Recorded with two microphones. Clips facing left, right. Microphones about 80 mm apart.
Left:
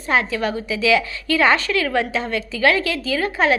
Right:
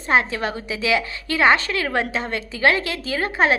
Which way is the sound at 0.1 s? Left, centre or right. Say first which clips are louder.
Even; right.